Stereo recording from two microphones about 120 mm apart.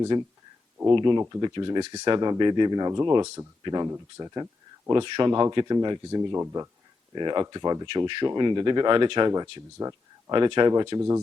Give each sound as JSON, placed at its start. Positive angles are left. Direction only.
{"t": 0.1, "sound": "speech", "side_deg": -40}
{"t": 3.8, "sound": "speech", "side_deg": -20}
{"t": 4.9, "sound": "speech", "side_deg": -40}
{"t": 6.3, "sound": "speech", "side_deg": -25}
{"t": 7.1, "sound": "speech", "side_deg": -40}
{"t": 10.3, "sound": "speech", "side_deg": -40}